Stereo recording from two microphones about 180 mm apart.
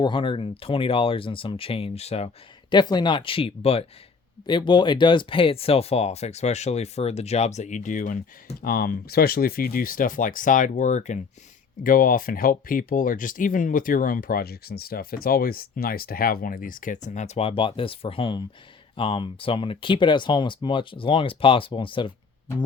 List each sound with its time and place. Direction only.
0.0 s speech: 25° left (ahead or behind)